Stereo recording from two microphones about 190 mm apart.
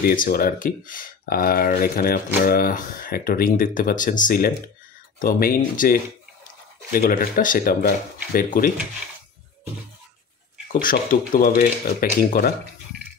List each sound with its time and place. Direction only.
0.0 s speech: 50° left (ahead or behind)
10.8 s speech: 45° left (ahead or behind)